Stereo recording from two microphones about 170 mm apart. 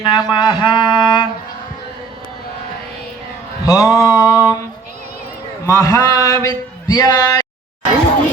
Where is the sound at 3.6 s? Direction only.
20° left (ahead or behind).